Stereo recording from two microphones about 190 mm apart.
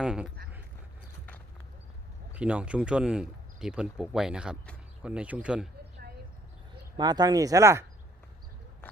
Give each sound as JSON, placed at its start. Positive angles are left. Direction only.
{"t": 0.0, "sound": "speech", "side_deg": -5}
{"t": 2.3, "sound": "speech", "side_deg": -5}
{"t": 6.9, "sound": "speech", "side_deg": -20}